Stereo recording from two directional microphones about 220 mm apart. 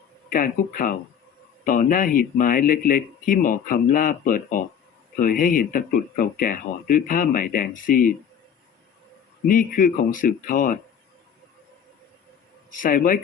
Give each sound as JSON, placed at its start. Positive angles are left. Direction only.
{"t": 0.3, "sound": "speech", "side_deg": 40}
{"t": 9.5, "sound": "speech", "side_deg": 40}
{"t": 12.7, "sound": "speech", "side_deg": 40}